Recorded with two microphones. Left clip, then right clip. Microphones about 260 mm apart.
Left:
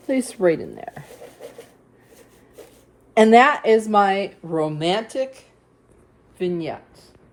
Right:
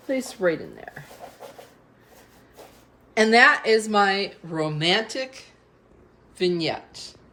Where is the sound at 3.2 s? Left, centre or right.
Centre.